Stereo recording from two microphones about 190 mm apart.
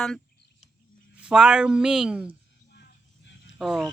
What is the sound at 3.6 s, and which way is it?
Speech, centre (ahead or behind).